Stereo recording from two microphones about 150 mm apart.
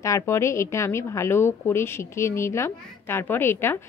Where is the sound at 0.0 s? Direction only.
20° left (ahead or behind).